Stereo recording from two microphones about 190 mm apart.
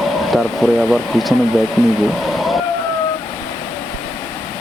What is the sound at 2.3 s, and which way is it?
Vehicle, centre (ahead or behind).